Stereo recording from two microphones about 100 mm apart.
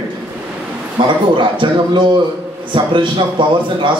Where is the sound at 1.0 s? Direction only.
55° right (ahead or behind).